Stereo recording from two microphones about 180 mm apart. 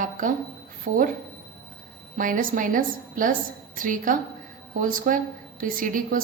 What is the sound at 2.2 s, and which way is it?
Speech, 50° right (ahead or behind).